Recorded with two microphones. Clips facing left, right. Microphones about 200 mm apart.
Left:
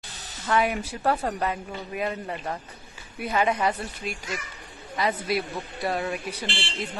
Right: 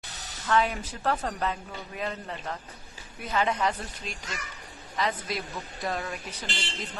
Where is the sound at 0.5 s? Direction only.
10° left (ahead or behind).